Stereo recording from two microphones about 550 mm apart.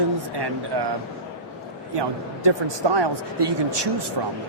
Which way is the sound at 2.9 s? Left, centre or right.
Right.